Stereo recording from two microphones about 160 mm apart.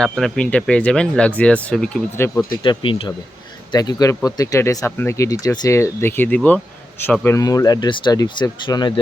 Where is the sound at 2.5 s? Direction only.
30° left (ahead or behind).